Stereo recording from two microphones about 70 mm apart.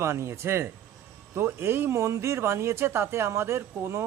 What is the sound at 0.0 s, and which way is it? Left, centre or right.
Speech, right.